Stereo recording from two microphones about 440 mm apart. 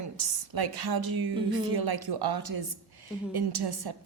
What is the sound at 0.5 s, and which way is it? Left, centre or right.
A woman's voice, right.